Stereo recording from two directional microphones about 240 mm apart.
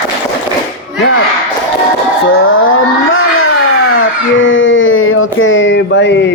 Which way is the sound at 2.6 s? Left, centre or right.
Left.